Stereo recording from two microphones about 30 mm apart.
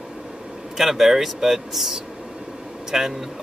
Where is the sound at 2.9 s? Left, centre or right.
Centre.